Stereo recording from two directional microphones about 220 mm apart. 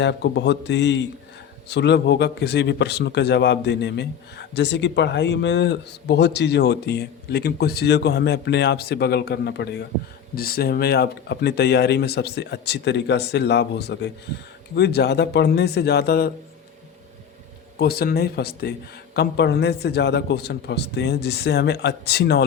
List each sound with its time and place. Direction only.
0.0 s speech: 50° left (ahead or behind)
17.7 s speech: 45° left (ahead or behind)